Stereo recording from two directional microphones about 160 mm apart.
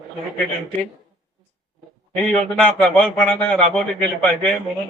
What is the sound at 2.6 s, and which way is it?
A man's voice, 5° left (ahead or behind).